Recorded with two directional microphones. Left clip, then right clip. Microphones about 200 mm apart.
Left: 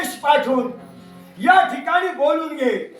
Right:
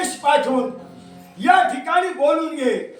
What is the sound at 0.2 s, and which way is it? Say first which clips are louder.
A man's voice: left 1 dB; 15° right (ahead or behind).